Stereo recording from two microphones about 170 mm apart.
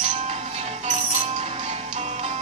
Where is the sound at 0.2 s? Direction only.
40° right (ahead or behind).